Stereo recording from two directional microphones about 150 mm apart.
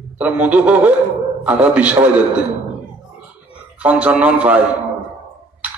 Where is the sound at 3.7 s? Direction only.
10° right (ahead or behind).